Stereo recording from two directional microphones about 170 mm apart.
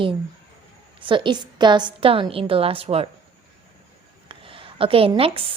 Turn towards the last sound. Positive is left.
turn(degrees=-30)  # may be behind; listen again after turning